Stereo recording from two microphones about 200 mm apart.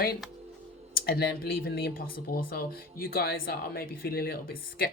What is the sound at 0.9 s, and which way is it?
Speech, 50° left (ahead or behind).